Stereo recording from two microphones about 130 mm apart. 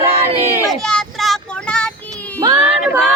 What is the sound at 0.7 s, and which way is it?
Child singing, 5° left (ahead or behind).